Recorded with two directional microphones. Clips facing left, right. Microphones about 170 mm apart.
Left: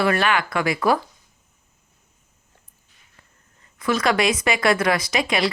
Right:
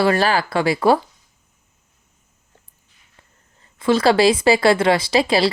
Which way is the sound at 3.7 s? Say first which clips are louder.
Right 5 dB; 30° right (ahead or behind).